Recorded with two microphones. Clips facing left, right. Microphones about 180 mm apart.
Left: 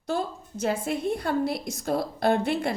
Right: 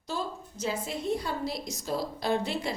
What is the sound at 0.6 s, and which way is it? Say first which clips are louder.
A woman's voice: left 5 dB; 55° left (ahead or behind).